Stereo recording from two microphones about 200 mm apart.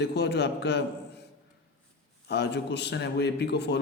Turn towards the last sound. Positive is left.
turn(degrees=55)  # may be behind; listen again after turning